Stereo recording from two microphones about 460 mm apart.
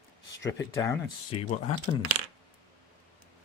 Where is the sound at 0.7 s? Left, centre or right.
Centre.